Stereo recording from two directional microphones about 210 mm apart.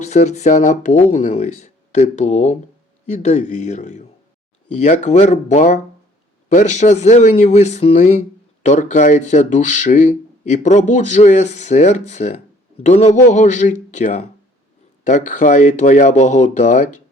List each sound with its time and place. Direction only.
0.0 s speech: 35° left (ahead or behind)